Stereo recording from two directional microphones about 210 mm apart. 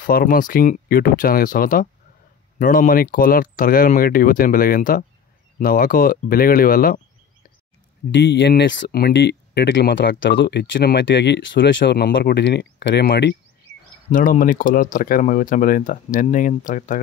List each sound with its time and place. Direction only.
0.0 s speech: 45° left (ahead or behind)
8.1 s speech: 55° left (ahead or behind)
14.0 s speech: 40° left (ahead or behind)